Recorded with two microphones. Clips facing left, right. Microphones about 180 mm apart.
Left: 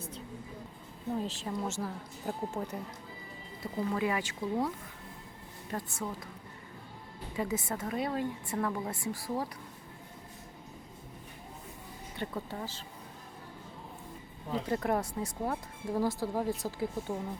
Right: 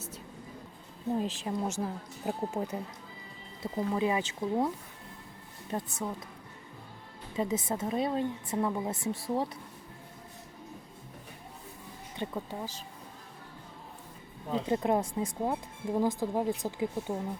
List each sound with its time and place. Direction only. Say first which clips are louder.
1.2 s a woman's voice: right 3 dB; 15° right (ahead or behind)
3.8 s speech: right 2 dB; 20° right (ahead or behind)
5.7 s speech: right 3 dB; 20° right (ahead or behind)
7.3 s speech: right 3 dB; 20° right (ahead or behind)
12.1 s a woman's voice: right 2 dB; 15° right (ahead or behind)
14.5 s speech: right 3 dB; 20° right (ahead or behind)